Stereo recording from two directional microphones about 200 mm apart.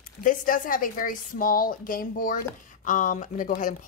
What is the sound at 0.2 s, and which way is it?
Speech, 40° left (ahead or behind).